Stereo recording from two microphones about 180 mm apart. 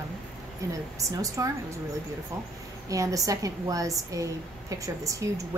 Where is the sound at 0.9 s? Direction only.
20° right (ahead or behind).